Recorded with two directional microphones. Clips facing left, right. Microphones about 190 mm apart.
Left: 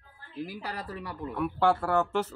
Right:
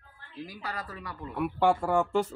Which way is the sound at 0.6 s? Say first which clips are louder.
Left 1 dB; 30° left (ahead or behind).